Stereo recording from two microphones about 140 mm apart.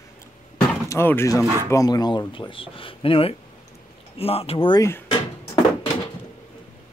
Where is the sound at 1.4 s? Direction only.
25° right (ahead or behind).